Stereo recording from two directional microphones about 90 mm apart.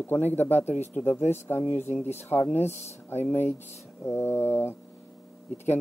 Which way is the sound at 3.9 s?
25° left (ahead or behind).